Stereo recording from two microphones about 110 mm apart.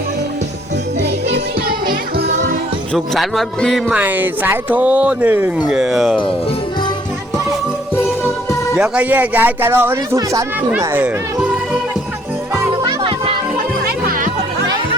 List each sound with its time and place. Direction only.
3.2 s speech: centre (ahead or behind)
3.8 s speech: 15° right (ahead or behind); by 6.3 s 5° left (ahead or behind)
8.8 s speech: 15° right (ahead or behind)
10.2 s speech: 35° right (ahead or behind)
11.0 s music: 10° right (ahead or behind)
13.0 s music: 55° right (ahead or behind)